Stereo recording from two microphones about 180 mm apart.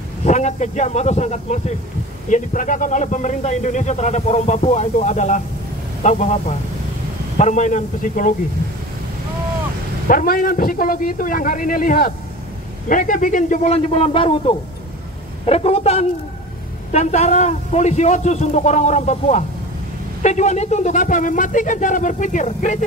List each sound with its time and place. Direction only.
0.2 s a man's voice: 40° left (ahead or behind)
7.3 s speech: 45° left (ahead or behind)
10.0 s a man's voice: 50° left (ahead or behind)